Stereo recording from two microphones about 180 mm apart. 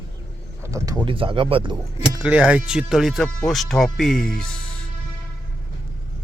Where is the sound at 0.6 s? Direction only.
15° right (ahead or behind).